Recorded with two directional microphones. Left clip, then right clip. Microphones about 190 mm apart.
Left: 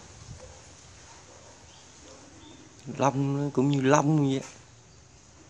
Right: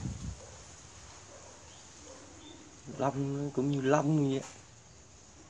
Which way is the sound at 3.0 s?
30° left (ahead or behind).